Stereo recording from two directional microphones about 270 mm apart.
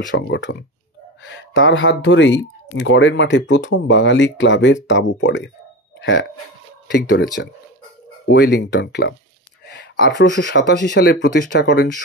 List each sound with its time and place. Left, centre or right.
0.1 s speech: left
7.4 s speech: left